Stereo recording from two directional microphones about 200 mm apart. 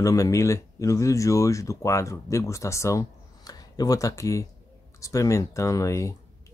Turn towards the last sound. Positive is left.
turn(degrees=15)  # may be behind; listen again after turning